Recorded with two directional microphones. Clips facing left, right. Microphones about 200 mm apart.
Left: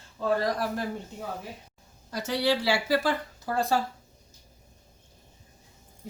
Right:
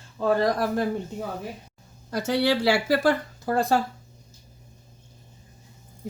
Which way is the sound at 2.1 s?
55° right (ahead or behind).